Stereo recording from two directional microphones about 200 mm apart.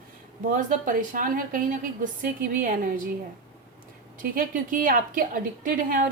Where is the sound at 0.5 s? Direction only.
40° right (ahead or behind).